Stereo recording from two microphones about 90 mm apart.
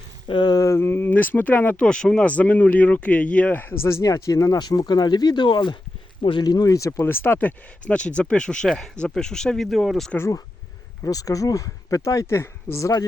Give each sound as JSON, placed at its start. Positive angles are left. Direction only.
{"t": 0.3, "sound": "a sound", "side_deg": 55}
{"t": 0.6, "sound": "speech", "side_deg": 30}
{"t": 4.0, "sound": "speech", "side_deg": 40}
{"t": 6.4, "sound": "speech", "side_deg": 45}
{"t": 10.2, "sound": "speech", "side_deg": 30}